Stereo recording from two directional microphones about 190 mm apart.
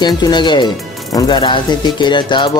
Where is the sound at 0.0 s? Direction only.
20° left (ahead or behind).